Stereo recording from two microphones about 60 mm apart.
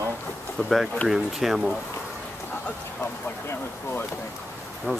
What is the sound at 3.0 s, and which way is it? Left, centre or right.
Speech, left.